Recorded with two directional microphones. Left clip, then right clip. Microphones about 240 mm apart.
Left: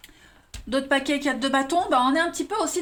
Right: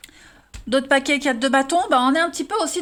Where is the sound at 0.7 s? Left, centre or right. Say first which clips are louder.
Right 5 dB; right.